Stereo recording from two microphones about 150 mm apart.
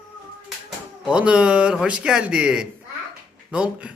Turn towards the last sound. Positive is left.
turn(degrees=-5)  # may be behind; listen again after turning